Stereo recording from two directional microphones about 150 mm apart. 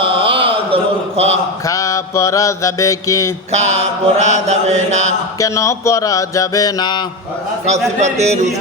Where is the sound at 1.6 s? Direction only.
20° left (ahead or behind).